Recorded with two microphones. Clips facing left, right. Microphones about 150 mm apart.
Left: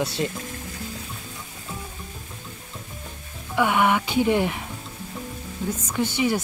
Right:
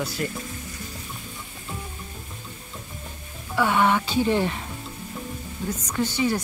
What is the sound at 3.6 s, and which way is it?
Speech, 15° left (ahead or behind).